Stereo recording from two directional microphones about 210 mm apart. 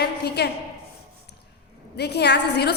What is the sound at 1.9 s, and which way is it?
Speech, 50° left (ahead or behind).